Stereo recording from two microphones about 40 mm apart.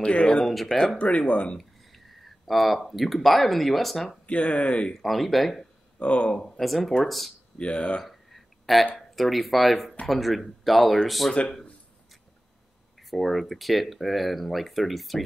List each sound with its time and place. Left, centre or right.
0.0 s speech: left
0.9 s speech: left
1.6 s speech: centre
4.3 s speech: left
4.9 s speech: centre
5.9 s speech: left
6.5 s speech: centre
7.5 s speech: left
8.0 s a sound: centre
8.9 s speech: centre
13.1 s speech: centre